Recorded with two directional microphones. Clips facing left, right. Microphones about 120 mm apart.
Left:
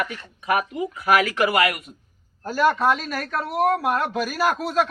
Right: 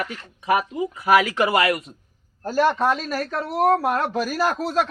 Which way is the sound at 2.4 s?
40° right (ahead or behind).